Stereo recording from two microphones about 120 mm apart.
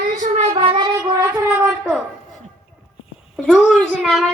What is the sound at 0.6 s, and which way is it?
Child singing, 45° right (ahead or behind).